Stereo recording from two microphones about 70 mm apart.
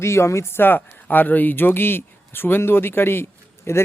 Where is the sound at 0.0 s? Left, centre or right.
Left.